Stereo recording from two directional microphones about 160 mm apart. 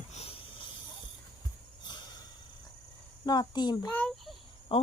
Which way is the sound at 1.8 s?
25° left (ahead or behind).